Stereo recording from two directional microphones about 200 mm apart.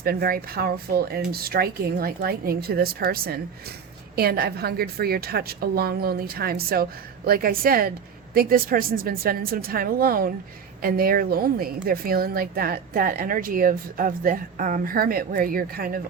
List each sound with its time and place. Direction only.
0.0 s a woman's voice: 50° right (ahead or behind)